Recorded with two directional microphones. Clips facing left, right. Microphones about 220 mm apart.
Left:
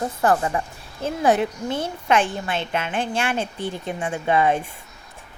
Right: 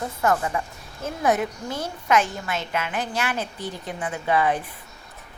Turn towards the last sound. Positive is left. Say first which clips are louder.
# left 3 dB
turn(degrees=25)  # may be behind; listen again after turning